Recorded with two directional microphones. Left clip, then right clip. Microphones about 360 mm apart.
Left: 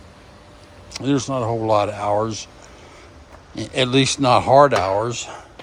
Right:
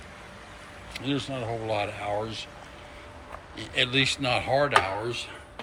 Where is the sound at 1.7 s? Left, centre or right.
Centre.